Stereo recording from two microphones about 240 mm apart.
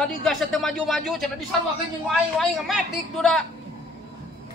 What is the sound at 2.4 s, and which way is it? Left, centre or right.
A man's voice, centre.